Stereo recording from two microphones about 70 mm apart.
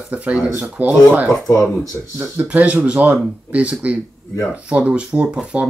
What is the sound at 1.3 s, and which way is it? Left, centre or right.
Speech, left.